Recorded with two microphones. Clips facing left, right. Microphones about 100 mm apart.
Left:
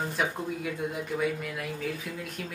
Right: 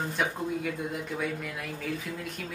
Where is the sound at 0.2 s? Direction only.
Centre (ahead or behind).